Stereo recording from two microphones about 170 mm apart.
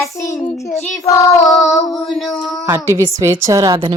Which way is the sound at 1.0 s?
20° left (ahead or behind).